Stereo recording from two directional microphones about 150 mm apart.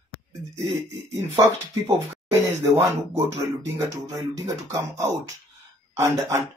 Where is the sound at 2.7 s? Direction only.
20° right (ahead or behind).